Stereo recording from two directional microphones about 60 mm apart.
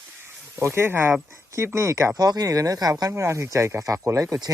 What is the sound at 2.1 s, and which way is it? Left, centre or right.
Speech, right.